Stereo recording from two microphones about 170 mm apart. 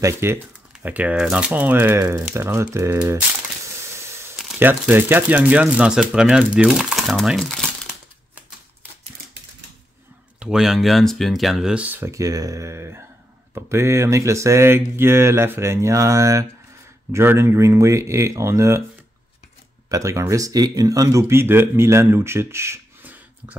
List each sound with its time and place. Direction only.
0.0 s speech: 15° right (ahead or behind)
4.6 s speech: 10° right (ahead or behind)
10.4 s speech: centre (ahead or behind)
19.9 s speech: 20° right (ahead or behind)